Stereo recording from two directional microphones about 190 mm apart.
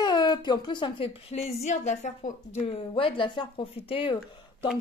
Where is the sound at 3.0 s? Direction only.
25° left (ahead or behind).